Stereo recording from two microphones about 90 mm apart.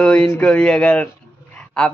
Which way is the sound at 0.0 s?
10° left (ahead or behind).